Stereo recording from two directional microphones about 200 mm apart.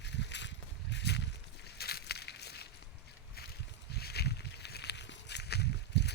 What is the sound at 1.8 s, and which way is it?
Crushing, 50° left (ahead or behind).